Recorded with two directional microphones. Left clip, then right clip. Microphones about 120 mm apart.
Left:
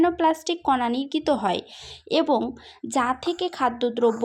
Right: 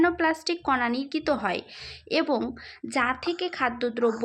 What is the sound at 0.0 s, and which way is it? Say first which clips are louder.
A woman's voice: left 3 dB; 50° left (ahead or behind).